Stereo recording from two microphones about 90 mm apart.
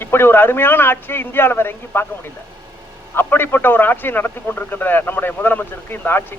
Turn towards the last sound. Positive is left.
turn(degrees=20)  # may be behind; listen again after turning